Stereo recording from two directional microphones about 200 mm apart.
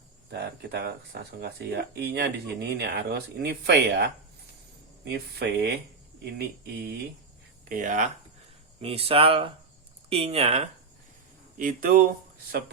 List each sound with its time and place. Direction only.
0.3 s speech: 55° right (ahead or behind)
7.7 s speech: 40° right (ahead or behind)
11.6 s speech: 45° right (ahead or behind)